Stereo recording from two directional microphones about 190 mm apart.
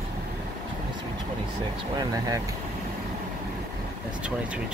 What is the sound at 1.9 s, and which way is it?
Speech, 20° right (ahead or behind).